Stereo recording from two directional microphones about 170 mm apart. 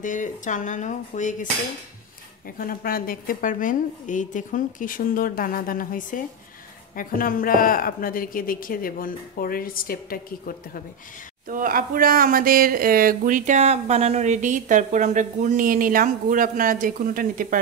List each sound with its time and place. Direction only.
0.0 s a woman's voice: 50° left (ahead or behind)
2.6 s a woman's voice: 55° left (ahead or behind)
11.4 s speech: 55° right (ahead or behind)